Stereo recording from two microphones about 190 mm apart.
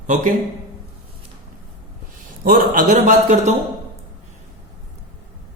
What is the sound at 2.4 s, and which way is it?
Speech, 45° right (ahead or behind).